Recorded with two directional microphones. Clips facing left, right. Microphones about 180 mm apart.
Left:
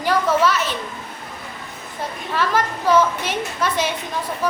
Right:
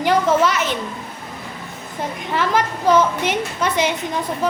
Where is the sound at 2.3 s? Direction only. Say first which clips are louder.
Right 1 dB; 20° right (ahead or behind).